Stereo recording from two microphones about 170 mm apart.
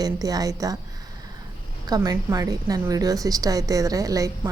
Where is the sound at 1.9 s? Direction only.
20° right (ahead or behind).